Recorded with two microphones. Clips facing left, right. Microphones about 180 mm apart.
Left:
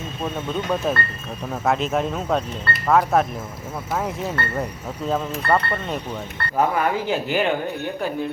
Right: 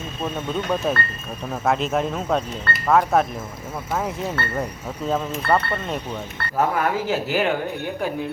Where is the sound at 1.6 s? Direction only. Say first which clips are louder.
Even; centre (ahead or behind).